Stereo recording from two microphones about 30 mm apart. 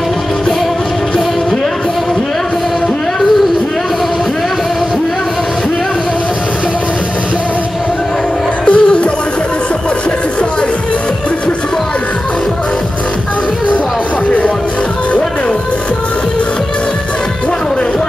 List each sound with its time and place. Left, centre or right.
8.6 s music: left